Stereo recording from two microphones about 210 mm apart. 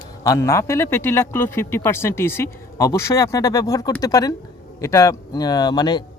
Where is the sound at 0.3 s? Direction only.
15° left (ahead or behind).